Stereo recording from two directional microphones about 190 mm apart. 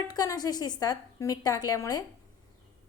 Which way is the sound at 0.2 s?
20° left (ahead or behind).